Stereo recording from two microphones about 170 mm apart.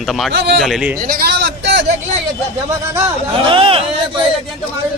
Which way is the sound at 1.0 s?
60° right (ahead or behind).